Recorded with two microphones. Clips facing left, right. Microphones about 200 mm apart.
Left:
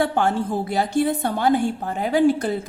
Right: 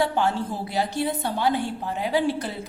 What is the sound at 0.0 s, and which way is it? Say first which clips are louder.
A woman's voice: left 3 dB; 50° left (ahead or behind).